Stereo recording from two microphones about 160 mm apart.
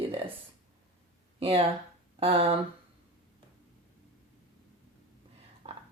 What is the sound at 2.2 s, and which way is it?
Speech, 35° right (ahead or behind).